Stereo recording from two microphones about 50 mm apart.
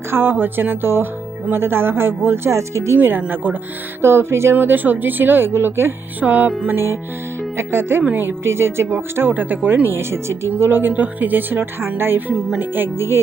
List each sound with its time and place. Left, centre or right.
0.1 s speech: right
3.2 s speech: right
4.0 s music: right
4.5 s speech: right
6.1 s speech: right
6.7 s speech: right
9.3 s speech: right
10.0 s music: right
10.5 s speech: right